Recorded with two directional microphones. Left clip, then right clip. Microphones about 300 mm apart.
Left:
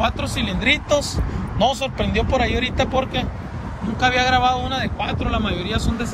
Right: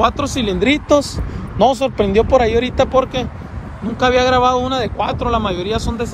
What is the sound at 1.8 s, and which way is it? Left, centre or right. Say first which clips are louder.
Speech: right 8 dB; right.